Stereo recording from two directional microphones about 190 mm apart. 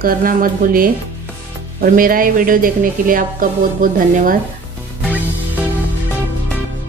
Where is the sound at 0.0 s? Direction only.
50° right (ahead or behind).